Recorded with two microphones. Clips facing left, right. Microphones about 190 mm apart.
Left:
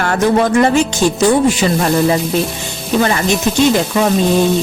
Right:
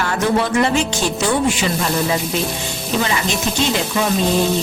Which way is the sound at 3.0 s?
50° left (ahead or behind).